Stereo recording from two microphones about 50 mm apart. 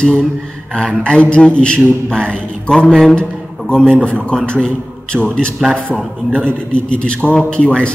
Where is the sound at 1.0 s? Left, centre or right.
Left.